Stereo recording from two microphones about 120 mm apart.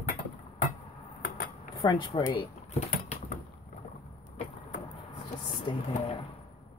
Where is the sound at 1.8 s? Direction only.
40° left (ahead or behind).